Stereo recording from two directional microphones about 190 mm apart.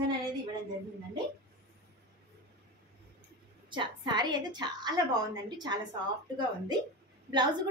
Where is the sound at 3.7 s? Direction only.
25° right (ahead or behind).